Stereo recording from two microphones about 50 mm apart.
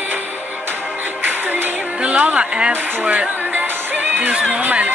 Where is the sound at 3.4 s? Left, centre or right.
Right.